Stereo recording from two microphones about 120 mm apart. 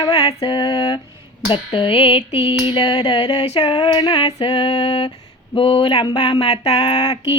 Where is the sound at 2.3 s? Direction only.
15° right (ahead or behind).